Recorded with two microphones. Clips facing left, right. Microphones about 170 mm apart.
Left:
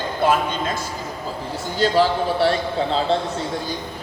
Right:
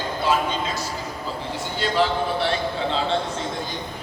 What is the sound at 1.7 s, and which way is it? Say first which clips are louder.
Speech: left 4 dB; 40° left (ahead or behind).